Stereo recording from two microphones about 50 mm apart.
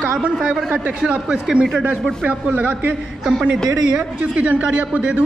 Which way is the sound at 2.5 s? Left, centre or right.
Right.